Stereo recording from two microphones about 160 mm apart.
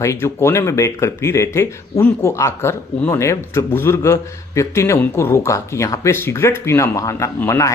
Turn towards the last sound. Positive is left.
turn(degrees=20)  # may be behind; listen again after turning